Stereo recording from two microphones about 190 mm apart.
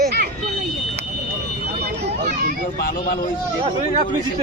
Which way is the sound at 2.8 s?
50° left (ahead or behind).